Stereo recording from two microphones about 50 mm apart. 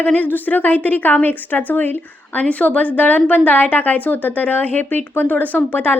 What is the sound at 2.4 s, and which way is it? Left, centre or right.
A woman's voice, left.